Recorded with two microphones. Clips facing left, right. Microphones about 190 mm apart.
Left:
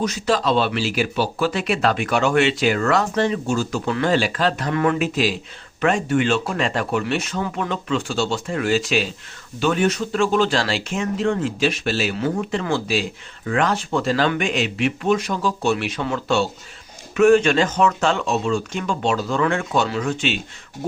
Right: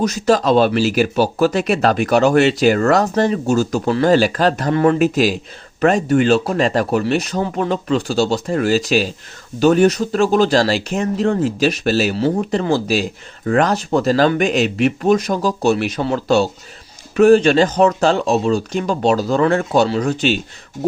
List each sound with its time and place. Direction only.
0.0 s speech: 40° right (ahead or behind)